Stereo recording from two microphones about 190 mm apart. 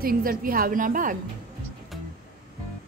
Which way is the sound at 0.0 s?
50° right (ahead or behind).